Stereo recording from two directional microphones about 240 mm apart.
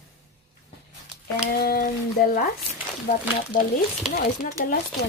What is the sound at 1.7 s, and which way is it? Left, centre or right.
Speech, left.